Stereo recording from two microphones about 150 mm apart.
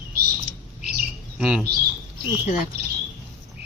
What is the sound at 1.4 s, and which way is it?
Speech, 5° right (ahead or behind).